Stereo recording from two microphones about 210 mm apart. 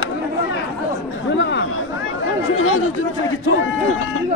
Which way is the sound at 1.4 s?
55° left (ahead or behind).